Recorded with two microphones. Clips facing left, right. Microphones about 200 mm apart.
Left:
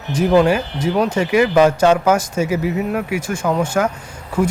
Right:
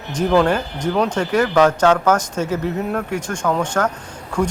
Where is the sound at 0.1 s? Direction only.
10° left (ahead or behind).